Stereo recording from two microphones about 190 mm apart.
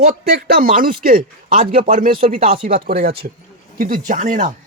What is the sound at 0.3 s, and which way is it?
Speech, 50° right (ahead or behind).